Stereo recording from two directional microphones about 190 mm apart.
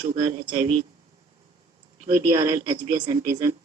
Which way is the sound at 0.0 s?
30° right (ahead or behind).